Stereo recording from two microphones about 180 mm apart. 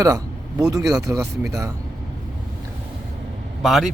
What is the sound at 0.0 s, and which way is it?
Speech, 20° right (ahead or behind).